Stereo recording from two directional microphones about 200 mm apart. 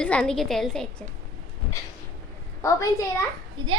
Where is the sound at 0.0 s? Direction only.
5° left (ahead or behind).